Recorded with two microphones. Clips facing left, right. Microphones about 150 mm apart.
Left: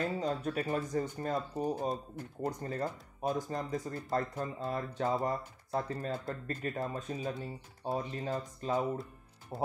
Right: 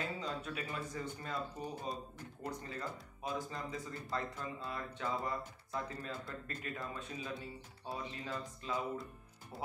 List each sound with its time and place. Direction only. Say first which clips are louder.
0.0 s speech: left 8 dB; 45° left (ahead or behind)